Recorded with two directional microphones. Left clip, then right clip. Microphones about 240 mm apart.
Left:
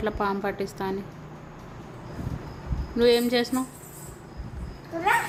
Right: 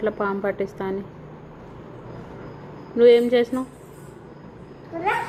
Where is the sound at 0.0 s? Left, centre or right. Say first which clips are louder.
Right 3 dB; centre.